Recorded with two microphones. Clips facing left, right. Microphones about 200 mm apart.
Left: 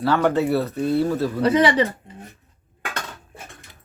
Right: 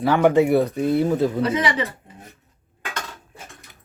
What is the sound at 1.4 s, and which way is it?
Speech, 35° left (ahead or behind).